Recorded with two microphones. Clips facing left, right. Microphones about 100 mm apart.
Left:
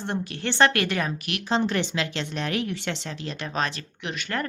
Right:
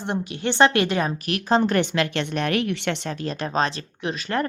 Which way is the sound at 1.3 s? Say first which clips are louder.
Right 5 dB; 45° right (ahead or behind).